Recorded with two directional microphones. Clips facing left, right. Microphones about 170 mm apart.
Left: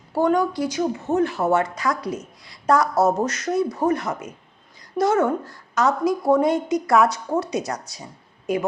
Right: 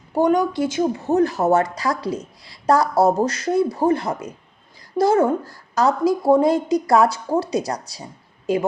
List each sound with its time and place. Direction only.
0.1 s a woman's voice: 15° right (ahead or behind)